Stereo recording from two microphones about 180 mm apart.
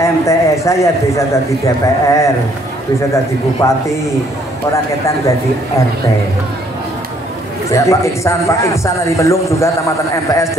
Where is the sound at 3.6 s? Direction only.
15° left (ahead or behind).